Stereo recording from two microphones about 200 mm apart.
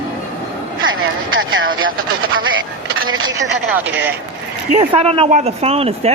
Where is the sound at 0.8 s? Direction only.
90° right.